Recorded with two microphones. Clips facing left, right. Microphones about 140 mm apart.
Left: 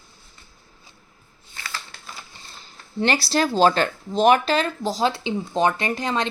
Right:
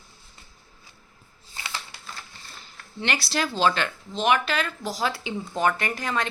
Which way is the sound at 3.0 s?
35° left (ahead or behind).